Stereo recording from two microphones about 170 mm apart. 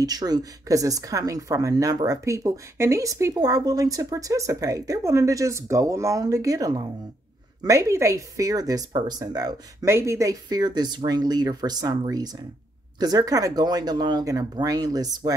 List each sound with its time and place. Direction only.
0.0 s speech: 25° right (ahead or behind)